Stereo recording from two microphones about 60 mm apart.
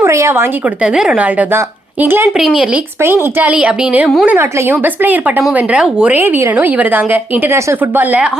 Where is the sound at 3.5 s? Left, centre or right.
Centre.